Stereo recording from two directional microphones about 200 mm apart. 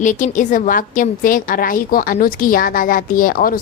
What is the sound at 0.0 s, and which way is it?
A woman's voice, 40° left (ahead or behind).